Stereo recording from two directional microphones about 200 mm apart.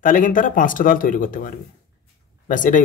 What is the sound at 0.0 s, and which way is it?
A man's voice, 40° left (ahead or behind).